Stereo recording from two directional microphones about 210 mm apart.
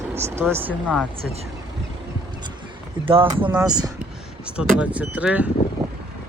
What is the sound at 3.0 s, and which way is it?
Speech, 25° right (ahead or behind).